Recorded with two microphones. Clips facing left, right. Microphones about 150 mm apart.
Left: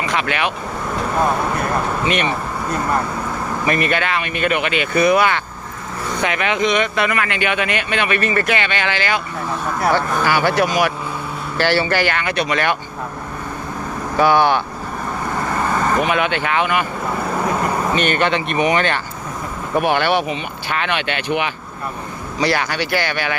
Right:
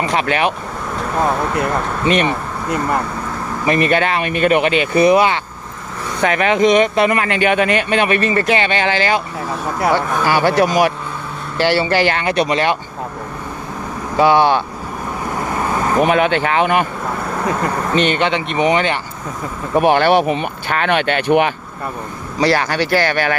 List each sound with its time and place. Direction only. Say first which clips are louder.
0.0 s speech: right 4 dB; 35° right (ahead or behind)
0.9 s speech: right 1 dB; centre (ahead or behind)
3.7 s speech: right 5 dB; 35° right (ahead or behind)
6.2 s speech: right 6 dB; 40° right (ahead or behind)
10.2 s speech: right 4 dB; 35° right (ahead or behind)
11.5 s speech: right 2 dB; 20° right (ahead or behind)
14.2 s speech: right 2 dB; 25° right (ahead or behind)
15.4 s vehicle: even; 10° right (ahead or behind)
16.0 s speech: right 4 dB; 40° right (ahead or behind)
17.2 s vehicle: left 3 dB; 5° left (ahead or behind)
17.9 s speech: right 4 dB; 25° right (ahead or behind)
19.7 s speech: right 5 dB; 35° right (ahead or behind)